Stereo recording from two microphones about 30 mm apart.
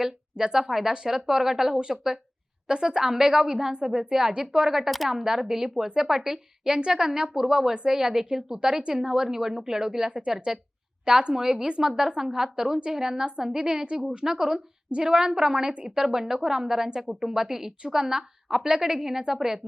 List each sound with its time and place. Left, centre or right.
0.0 s a woman's voice: right
2.6 s a woman's voice: right
4.9 s speech: centre
5.1 s a woman's voice: centre
14.8 s a woman's voice: right
15.1 s a woman's voice: centre